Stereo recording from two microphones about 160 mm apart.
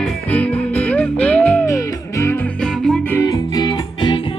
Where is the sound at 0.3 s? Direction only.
10° left (ahead or behind).